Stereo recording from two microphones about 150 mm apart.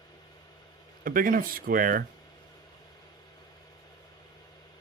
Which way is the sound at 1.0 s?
70° right (ahead or behind).